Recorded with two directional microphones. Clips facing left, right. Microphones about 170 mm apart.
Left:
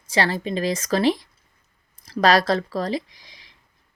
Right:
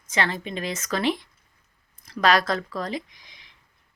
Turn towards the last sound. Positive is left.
turn(degrees=35)  # may be behind; listen again after turning